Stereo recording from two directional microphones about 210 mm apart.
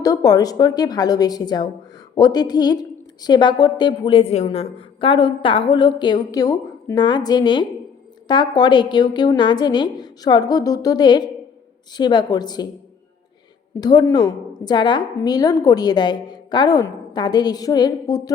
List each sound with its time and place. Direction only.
0.0 s a woman's voice: 15° left (ahead or behind)
13.7 s a woman's voice: 20° left (ahead or behind)